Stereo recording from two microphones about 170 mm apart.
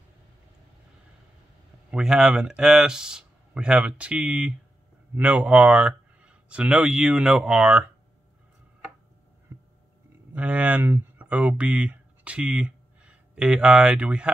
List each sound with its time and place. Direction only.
1.9 s speech: 5° right (ahead or behind)
9.5 s a sound: 15° right (ahead or behind)
10.3 s speech: 5° right (ahead or behind)